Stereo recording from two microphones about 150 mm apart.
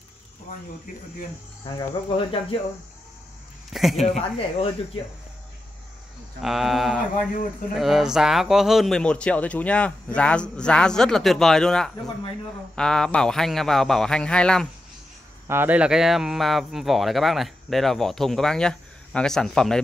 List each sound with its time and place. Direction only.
1.8 s speech: 35° left (ahead or behind)
3.7 s speech: centre (ahead or behind)
4.1 s speech: 40° left (ahead or behind)
6.4 s speech: centre (ahead or behind)
15.4 s speech: 15° right (ahead or behind); by 19.8 s 5° left (ahead or behind)